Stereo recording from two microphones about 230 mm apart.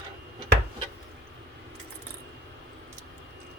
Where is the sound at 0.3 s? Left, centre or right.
Right.